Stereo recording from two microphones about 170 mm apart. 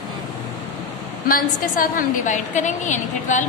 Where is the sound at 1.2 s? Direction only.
55° left (ahead or behind).